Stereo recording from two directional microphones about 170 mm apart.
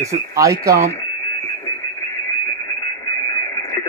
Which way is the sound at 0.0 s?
20° right (ahead or behind).